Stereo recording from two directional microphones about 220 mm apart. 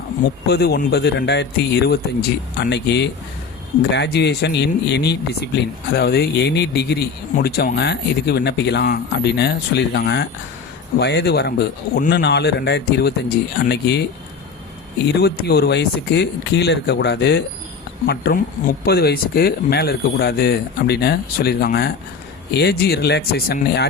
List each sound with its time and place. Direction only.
0.4 s speech: 45° left (ahead or behind)